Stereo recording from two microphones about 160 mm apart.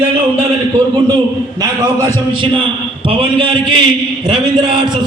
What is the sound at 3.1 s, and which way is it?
A man's voice, 30° right (ahead or behind).